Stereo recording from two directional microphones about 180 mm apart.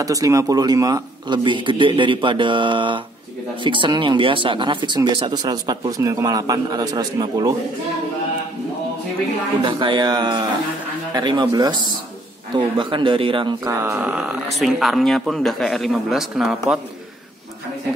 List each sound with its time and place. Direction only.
0.0 s speech: 20° right (ahead or behind)
9.6 s speech: 25° right (ahead or behind)
13.7 s speech: 15° right (ahead or behind)